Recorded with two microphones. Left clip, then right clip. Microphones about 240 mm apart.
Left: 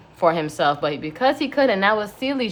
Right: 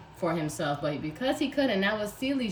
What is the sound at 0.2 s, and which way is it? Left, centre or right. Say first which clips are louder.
Speech: left 11 dB; centre.